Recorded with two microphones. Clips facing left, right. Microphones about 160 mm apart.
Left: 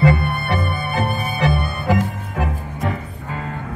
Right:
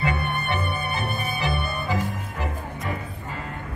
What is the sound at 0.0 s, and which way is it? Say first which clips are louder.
Music: left 8 dB; 90° left.